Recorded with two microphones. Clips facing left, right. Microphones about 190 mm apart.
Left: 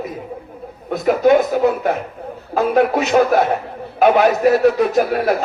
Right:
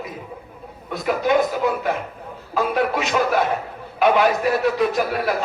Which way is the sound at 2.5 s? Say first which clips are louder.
Left 6 dB; 45° left (ahead or behind).